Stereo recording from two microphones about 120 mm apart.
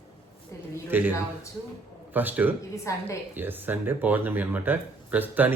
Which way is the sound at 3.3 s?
15° right (ahead or behind).